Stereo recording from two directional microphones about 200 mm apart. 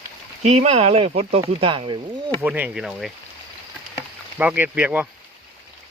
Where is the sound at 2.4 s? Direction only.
10° right (ahead or behind).